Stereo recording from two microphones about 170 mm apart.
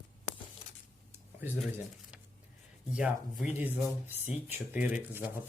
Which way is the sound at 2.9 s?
5° right (ahead or behind).